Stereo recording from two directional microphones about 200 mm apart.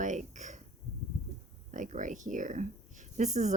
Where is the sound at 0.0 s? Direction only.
40° right (ahead or behind).